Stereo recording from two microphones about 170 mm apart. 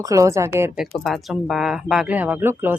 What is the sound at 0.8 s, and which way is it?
A woman's voice, centre (ahead or behind).